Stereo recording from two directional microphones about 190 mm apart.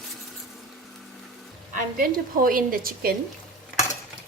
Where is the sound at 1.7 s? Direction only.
45° right (ahead or behind).